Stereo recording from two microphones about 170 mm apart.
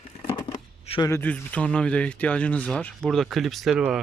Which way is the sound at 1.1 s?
10° left (ahead or behind).